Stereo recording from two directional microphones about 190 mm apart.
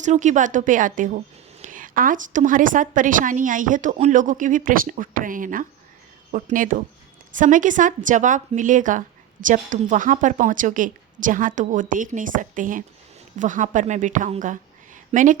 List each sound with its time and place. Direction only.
0.0 s a woman's voice: 40° right (ahead or behind)